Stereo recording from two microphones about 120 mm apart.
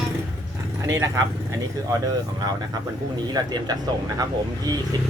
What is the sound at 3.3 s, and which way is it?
Speech, 35° right (ahead or behind).